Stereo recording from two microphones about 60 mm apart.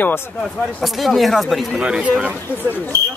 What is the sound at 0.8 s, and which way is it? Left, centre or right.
Speech, centre.